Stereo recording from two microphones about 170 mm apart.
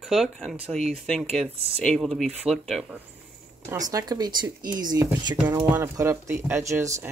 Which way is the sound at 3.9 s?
20° right (ahead or behind).